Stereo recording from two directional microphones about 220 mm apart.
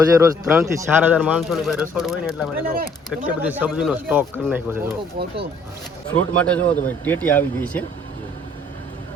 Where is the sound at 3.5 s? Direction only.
5° right (ahead or behind).